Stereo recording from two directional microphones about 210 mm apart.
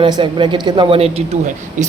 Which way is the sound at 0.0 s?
25° right (ahead or behind).